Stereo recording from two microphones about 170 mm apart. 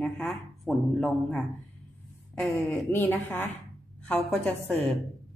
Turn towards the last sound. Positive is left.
turn(degrees=0)  # may be behind; listen again after turning